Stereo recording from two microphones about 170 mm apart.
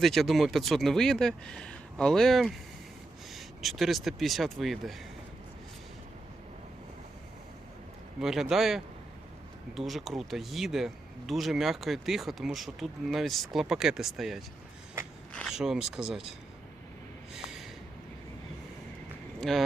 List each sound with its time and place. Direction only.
0.0 s speech: centre (ahead or behind)
8.2 s speech: centre (ahead or behind)
17.3 s a sound: centre (ahead or behind)
19.4 s speech: centre (ahead or behind)